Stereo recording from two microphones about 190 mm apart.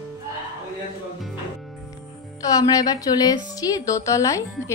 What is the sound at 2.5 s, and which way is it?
A woman's voice, 20° left (ahead or behind).